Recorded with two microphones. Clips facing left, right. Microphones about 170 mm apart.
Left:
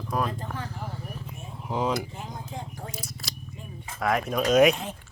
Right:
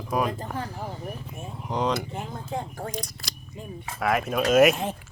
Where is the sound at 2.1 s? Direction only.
55° right (ahead or behind).